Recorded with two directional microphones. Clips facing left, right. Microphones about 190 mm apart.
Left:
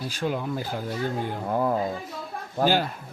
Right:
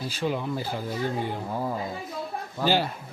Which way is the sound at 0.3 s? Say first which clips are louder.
Even; centre (ahead or behind).